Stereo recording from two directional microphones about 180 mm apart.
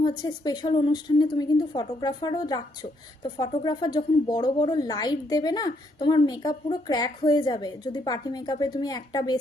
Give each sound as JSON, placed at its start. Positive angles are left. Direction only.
{"t": 0.2, "sound": "a woman's voice", "side_deg": 25}
{"t": 3.6, "sound": "a woman's voice", "side_deg": 25}